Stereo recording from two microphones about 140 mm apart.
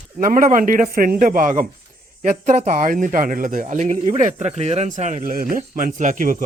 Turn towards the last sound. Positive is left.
turn(degrees=-70)  # may be behind; listen again after turning